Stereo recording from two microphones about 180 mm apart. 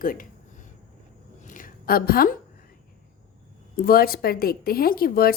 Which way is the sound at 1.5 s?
50° left (ahead or behind).